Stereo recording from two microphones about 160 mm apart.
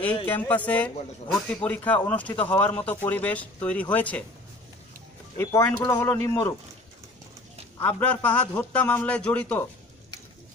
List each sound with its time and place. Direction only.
0.0 s a man's voice: 10° left (ahead or behind)
5.4 s a man's voice: 15° left (ahead or behind)
7.8 s a man's voice: 10° left (ahead or behind)